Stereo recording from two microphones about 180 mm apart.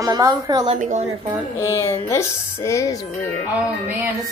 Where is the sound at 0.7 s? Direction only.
45° right (ahead or behind).